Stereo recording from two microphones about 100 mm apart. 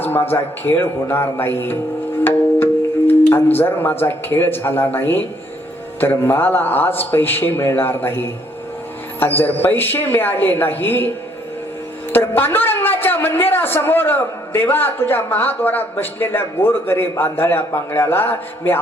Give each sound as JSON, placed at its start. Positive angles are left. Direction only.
{"t": 0.0, "sound": "a woman's voice", "side_deg": 20}
{"t": 3.1, "sound": "a woman's voice", "side_deg": 20}
{"t": 9.2, "sound": "a woman's voice", "side_deg": 20}
{"t": 12.1, "sound": "a woman's voice", "side_deg": 20}